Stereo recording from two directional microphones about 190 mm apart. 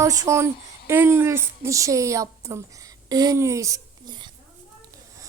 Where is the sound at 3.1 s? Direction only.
20° right (ahead or behind).